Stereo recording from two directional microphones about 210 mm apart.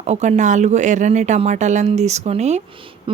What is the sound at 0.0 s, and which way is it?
A woman's voice, 35° right (ahead or behind).